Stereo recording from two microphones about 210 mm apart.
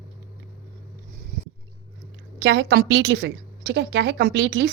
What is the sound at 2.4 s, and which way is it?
A woman's voice, 55° right (ahead or behind).